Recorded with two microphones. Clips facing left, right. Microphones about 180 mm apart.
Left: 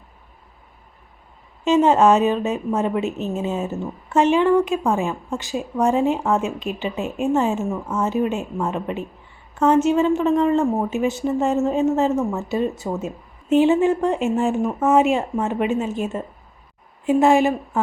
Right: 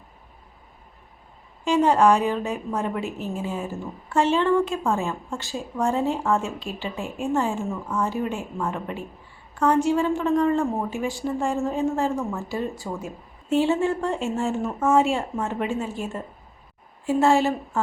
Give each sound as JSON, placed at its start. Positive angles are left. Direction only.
{"t": 1.6, "sound": "a woman's voice", "side_deg": 20}